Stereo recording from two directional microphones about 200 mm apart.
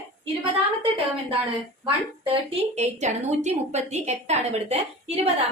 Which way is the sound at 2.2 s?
25° right (ahead or behind).